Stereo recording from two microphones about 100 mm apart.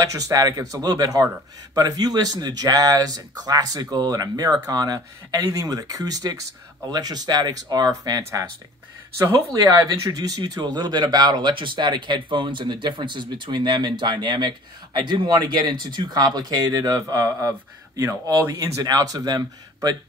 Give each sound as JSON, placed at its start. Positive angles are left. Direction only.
{"t": 0.0, "sound": "speech", "side_deg": -35}
{"t": 10.0, "sound": "speech", "side_deg": -40}